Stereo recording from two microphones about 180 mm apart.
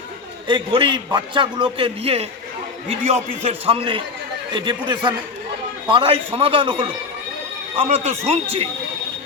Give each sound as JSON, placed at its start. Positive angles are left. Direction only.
{"t": 0.4, "sound": "a man's voice", "side_deg": -25}
{"t": 3.4, "sound": "a man's voice", "side_deg": -30}